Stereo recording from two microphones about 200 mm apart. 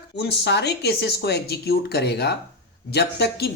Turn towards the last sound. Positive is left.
turn(degrees=55)  # may be behind; listen again after turning